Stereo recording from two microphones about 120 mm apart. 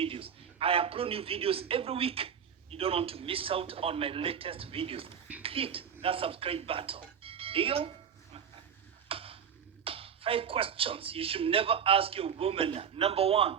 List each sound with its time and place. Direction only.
0.0 s a man's voice: 50° right (ahead or behind)
9.0 s a sound: 50° right (ahead or behind)
9.8 s a man's voice: 50° right (ahead or behind)